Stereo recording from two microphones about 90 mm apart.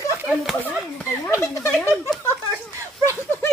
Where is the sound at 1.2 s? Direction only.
35° left (ahead or behind).